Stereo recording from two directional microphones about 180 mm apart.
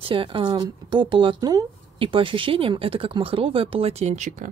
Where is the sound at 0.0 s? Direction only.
30° right (ahead or behind).